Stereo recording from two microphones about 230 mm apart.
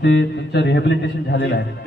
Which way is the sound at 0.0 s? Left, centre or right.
Left.